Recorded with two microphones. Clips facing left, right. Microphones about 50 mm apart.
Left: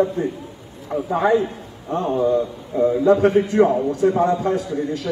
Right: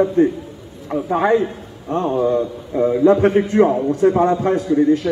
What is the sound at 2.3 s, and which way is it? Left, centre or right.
A man's voice, right.